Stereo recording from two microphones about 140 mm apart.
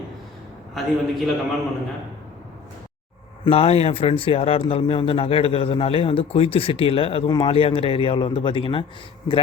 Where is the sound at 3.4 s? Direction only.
45° left (ahead or behind).